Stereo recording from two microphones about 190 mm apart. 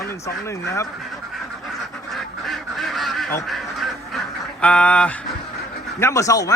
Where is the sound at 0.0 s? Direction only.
15° left (ahead or behind).